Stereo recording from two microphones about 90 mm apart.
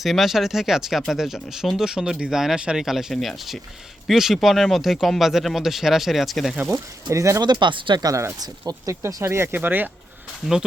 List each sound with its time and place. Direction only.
0.0 s speech: centre (ahead or behind)
6.7 s speech: 35° right (ahead or behind)
7.4 s speech: 60° right (ahead or behind)
8.0 s speech: 35° right (ahead or behind)
8.4 s speech: 45° right (ahead or behind)
9.0 s speech: 35° right (ahead or behind)